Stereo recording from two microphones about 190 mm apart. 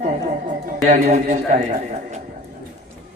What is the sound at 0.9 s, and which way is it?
A man's voice, 40° right (ahead or behind).